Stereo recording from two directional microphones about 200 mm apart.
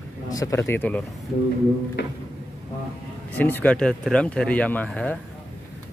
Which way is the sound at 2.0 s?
65° left (ahead or behind).